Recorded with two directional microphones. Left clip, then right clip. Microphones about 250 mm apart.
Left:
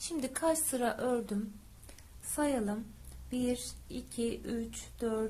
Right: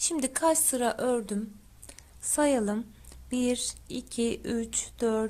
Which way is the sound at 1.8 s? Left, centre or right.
Right.